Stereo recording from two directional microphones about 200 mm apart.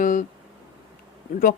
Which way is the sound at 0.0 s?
40° left (ahead or behind).